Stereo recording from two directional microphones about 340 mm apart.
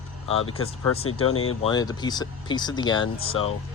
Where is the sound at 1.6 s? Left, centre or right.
Centre.